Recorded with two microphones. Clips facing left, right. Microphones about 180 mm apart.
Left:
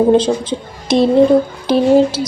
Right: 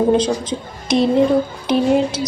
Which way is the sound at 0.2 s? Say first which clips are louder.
Left 3 dB; 30° left (ahead or behind).